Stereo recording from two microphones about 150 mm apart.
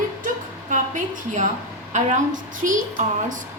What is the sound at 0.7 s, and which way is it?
A woman's voice, 55° right (ahead or behind).